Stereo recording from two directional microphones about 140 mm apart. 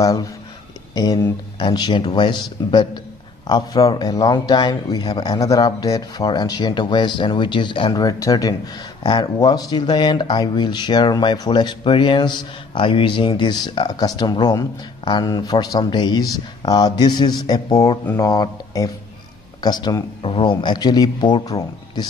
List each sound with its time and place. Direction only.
0.0 s speech: 25° left (ahead or behind)